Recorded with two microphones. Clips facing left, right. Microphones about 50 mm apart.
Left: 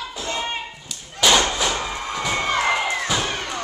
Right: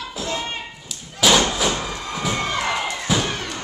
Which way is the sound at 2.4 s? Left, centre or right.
Centre.